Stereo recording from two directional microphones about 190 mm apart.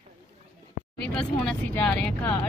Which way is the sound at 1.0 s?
5° left (ahead or behind).